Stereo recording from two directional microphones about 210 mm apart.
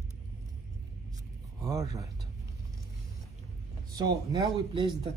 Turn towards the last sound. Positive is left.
turn(degrees=-20)  # may be behind; listen again after turning